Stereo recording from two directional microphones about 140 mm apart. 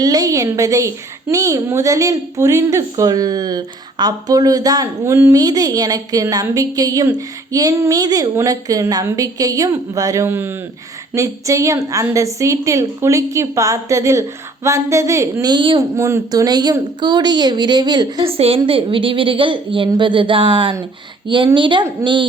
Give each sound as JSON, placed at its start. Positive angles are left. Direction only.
{"t": 0.0, "sound": "a woman's voice", "side_deg": -25}
{"t": 16.0, "sound": "a woman's voice", "side_deg": -20}